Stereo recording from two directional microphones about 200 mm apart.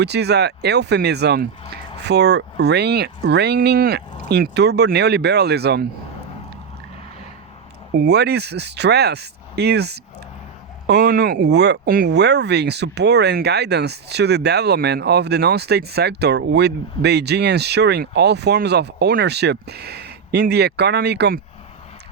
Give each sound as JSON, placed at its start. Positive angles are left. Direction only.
{"t": 0.0, "sound": "speech", "side_deg": -55}
{"t": 7.9, "sound": "speech", "side_deg": -55}